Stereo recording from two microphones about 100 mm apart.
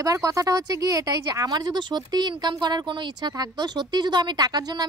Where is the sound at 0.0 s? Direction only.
35° right (ahead or behind).